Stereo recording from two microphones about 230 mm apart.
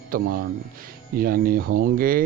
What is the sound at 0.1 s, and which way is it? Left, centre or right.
Speech, right.